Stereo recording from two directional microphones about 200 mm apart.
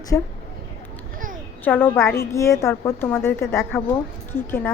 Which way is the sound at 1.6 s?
10° left (ahead or behind).